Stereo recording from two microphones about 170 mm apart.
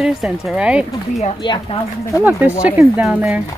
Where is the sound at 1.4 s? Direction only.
25° left (ahead or behind).